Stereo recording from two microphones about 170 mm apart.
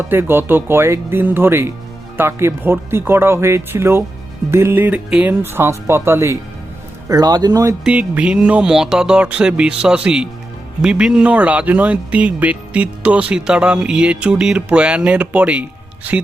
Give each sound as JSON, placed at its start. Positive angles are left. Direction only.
{"t": 0.1, "sound": "speech", "side_deg": -15}
{"t": 7.9, "sound": "speech", "side_deg": -5}